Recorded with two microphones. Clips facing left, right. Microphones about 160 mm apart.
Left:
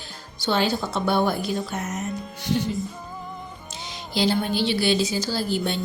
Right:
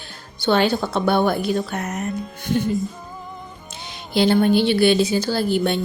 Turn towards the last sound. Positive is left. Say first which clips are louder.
# right 5 dB
turn(degrees=-60)  # may be behind; listen again after turning